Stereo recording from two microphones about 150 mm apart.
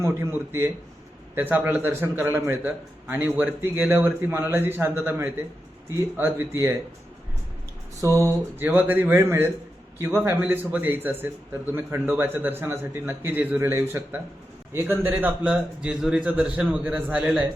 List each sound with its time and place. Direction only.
0.0 s a man's voice: 15° right (ahead or behind)
8.0 s a man's voice: 20° right (ahead or behind)